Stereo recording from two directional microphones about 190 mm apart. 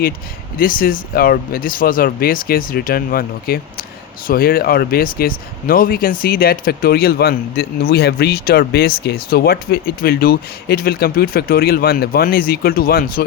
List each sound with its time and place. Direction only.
0.6 s speech: 50° left (ahead or behind)